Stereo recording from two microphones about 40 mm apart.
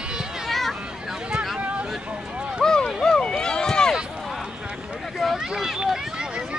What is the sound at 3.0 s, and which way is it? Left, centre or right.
Run, centre.